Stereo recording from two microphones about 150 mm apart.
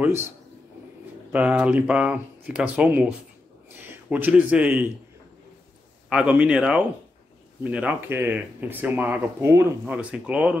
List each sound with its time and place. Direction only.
0.0 s speech: 15° right (ahead or behind)
1.3 s speech: 10° right (ahead or behind)
6.0 s a man's voice: 5° right (ahead or behind)